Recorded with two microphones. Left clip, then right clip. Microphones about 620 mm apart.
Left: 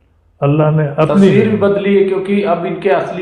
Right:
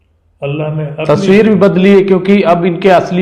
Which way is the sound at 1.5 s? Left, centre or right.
Right.